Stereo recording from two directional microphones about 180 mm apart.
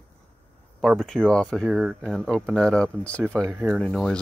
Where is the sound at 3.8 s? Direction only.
Centre (ahead or behind).